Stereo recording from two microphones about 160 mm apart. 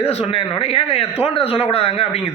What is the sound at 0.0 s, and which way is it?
A man's voice, 40° left (ahead or behind).